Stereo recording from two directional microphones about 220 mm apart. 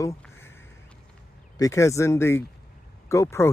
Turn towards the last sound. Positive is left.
turn(degrees=10)  # may be behind; listen again after turning